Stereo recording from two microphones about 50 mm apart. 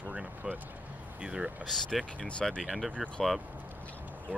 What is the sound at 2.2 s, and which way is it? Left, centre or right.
Speech, centre.